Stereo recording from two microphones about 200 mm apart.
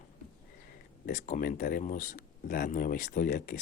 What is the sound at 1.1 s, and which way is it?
Speech, 40° left (ahead or behind).